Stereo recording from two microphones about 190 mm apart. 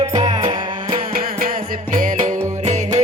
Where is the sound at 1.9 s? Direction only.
40° right (ahead or behind).